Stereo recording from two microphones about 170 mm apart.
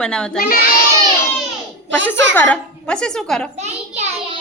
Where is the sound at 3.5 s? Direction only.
40° right (ahead or behind).